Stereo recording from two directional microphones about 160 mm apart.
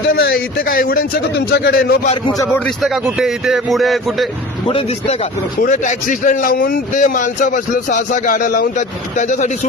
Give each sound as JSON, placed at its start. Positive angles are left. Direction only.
{"t": 0.1, "sound": "a man's voice", "side_deg": 80}
{"t": 2.3, "sound": "a man's voice", "side_deg": 20}
{"t": 2.6, "sound": "speech", "side_deg": 0}
{"t": 4.6, "sound": "speech", "side_deg": 40}
{"t": 5.6, "sound": "a man's voice", "side_deg": 55}